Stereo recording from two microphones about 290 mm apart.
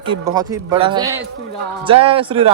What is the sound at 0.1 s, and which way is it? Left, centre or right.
Speech, centre.